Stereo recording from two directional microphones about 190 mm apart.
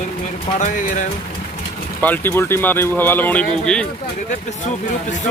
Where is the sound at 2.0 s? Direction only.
10° left (ahead or behind).